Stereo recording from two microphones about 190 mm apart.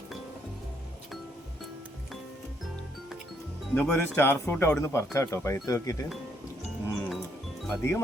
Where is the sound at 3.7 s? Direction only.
10° left (ahead or behind).